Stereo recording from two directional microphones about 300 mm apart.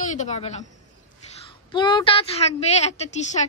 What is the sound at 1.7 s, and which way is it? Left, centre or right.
A woman's voice, centre.